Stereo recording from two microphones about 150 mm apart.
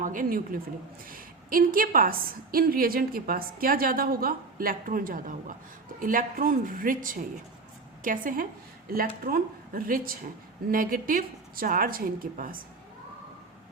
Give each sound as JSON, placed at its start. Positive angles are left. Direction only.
{"t": 0.0, "sound": "a woman's voice", "side_deg": -65}
{"t": 8.9, "sound": "a woman's voice", "side_deg": -75}